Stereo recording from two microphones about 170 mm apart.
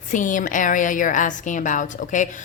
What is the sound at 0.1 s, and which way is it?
A woman's voice, 50° left (ahead or behind).